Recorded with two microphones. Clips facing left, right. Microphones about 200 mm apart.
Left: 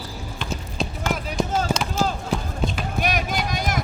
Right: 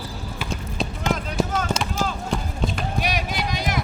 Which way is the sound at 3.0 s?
50° left (ahead or behind).